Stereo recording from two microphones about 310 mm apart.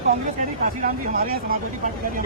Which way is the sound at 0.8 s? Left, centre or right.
Right.